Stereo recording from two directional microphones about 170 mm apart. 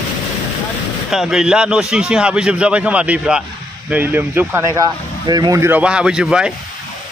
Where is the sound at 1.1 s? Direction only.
5° right (ahead or behind).